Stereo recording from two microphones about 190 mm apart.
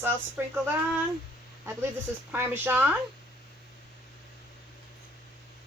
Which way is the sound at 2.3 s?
10° right (ahead or behind).